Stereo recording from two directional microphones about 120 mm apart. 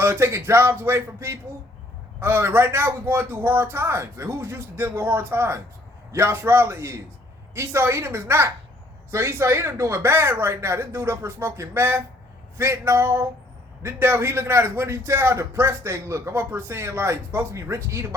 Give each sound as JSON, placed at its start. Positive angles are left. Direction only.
{"t": 0.0, "sound": "a man's voice", "side_deg": -20}